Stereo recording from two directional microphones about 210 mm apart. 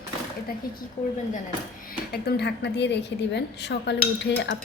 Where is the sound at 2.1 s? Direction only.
50° left (ahead or behind).